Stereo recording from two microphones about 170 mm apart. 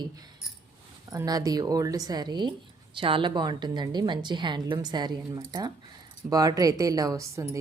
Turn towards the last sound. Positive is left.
turn(degrees=-15)  # may be behind; listen again after turning